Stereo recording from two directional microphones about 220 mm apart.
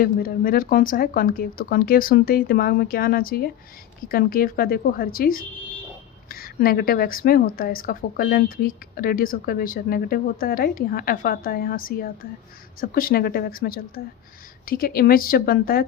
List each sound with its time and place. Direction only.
0.0 s a woman's voice: 40° left (ahead or behind)